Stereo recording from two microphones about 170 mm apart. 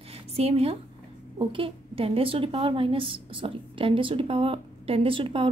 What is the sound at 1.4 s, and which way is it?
A woman's voice, 30° right (ahead or behind).